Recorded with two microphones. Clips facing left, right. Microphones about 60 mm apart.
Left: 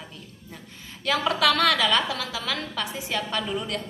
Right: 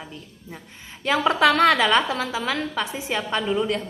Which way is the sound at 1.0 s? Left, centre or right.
Right.